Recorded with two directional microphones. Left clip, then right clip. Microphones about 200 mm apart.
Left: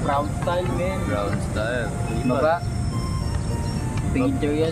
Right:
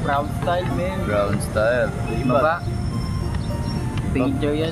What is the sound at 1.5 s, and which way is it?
Speech, 40° right (ahead or behind).